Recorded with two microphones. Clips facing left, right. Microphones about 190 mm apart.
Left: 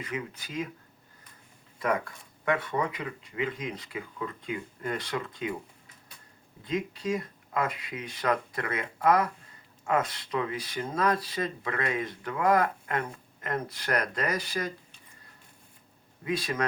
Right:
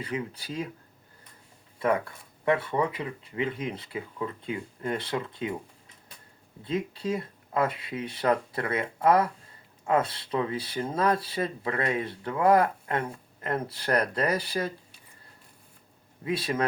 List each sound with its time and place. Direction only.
0.0 s speech: 30° right (ahead or behind)
2.4 s speech: 30° right (ahead or behind)
6.6 s speech: 30° right (ahead or behind)
16.2 s speech: 30° right (ahead or behind)